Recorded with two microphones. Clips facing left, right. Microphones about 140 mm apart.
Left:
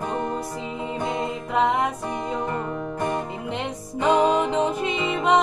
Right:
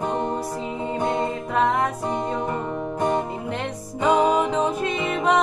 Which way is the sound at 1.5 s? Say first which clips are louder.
Even; centre (ahead or behind).